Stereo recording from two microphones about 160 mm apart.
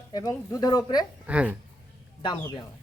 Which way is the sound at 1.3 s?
10° right (ahead or behind).